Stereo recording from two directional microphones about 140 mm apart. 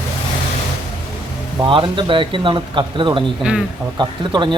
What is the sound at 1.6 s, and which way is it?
Speech, 35° right (ahead or behind).